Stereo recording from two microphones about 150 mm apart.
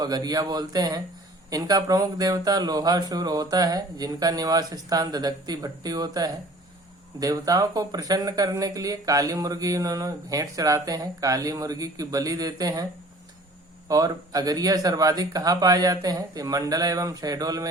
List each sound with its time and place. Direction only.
0.0 s speech: 25° right (ahead or behind)